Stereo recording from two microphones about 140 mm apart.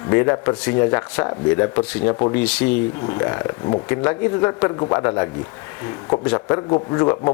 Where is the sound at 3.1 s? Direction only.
25° left (ahead or behind).